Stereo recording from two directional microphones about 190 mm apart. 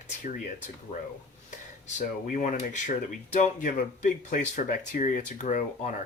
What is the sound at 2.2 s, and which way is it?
Speech, 40° left (ahead or behind).